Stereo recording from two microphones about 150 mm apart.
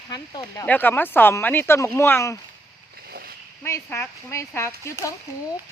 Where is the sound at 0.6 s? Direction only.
10° left (ahead or behind).